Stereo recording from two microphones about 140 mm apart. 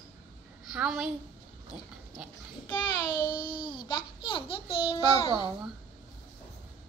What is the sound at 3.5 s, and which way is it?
Babbling, 35° left (ahead or behind).